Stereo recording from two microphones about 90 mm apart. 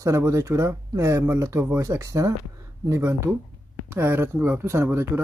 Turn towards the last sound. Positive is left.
turn(degrees=-30)  # may be behind; listen again after turning